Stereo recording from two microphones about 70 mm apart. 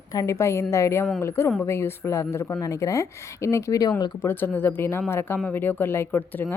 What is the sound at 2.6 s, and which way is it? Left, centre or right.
Speech, left.